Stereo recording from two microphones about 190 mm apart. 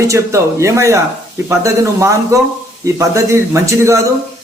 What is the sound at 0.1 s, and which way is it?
A man's voice, 15° right (ahead or behind).